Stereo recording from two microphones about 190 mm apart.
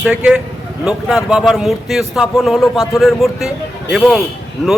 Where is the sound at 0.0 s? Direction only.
5° right (ahead or behind).